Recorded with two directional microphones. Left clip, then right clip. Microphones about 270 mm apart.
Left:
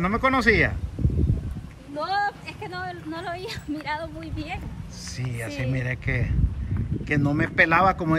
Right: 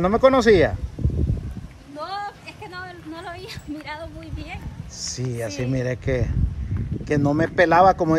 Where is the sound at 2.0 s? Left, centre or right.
Centre.